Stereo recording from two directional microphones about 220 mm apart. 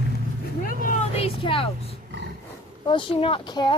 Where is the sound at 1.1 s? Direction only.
25° left (ahead or behind).